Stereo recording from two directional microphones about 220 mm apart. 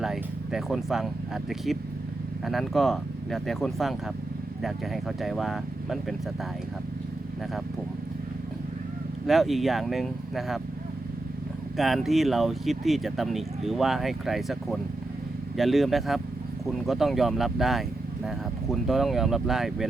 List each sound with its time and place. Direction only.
0.0 s speech: centre (ahead or behind)
9.2 s speech: centre (ahead or behind)
11.8 s speech: centre (ahead or behind)